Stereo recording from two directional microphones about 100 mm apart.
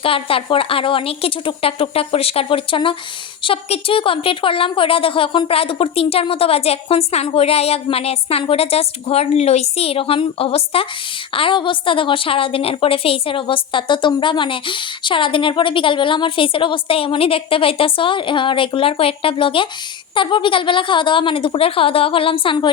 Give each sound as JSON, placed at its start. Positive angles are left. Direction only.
{"t": 0.0, "sound": "a woman's voice", "side_deg": 65}
{"t": 11.3, "sound": "a woman's voice", "side_deg": 60}